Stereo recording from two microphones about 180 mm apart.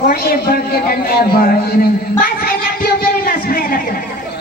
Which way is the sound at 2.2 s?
55° left (ahead or behind).